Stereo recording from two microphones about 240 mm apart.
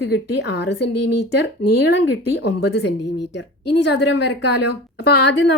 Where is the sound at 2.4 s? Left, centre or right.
Left.